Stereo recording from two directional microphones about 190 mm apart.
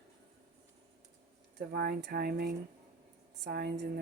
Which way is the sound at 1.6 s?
60° right (ahead or behind).